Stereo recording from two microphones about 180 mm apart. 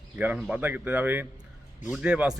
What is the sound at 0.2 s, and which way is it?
A man's voice, 10° right (ahead or behind).